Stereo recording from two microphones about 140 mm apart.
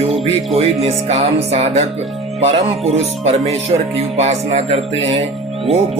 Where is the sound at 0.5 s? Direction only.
45° right (ahead or behind).